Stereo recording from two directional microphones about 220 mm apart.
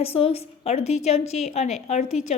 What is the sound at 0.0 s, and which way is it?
A woman's voice, 25° left (ahead or behind).